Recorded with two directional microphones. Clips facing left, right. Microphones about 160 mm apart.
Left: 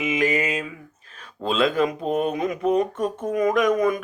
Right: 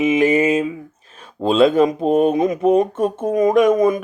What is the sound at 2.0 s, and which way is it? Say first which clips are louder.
Speech: right 8 dB; 40° right (ahead or behind).